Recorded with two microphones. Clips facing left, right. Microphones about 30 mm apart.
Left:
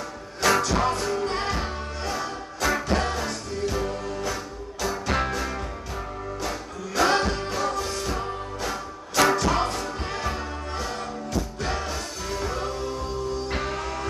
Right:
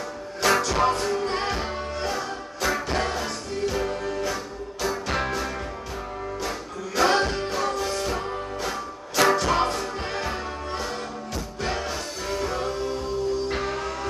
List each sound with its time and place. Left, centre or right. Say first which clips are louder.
0.4 s music: right 1 dB; centre
7.0 s music: right 1 dB; centre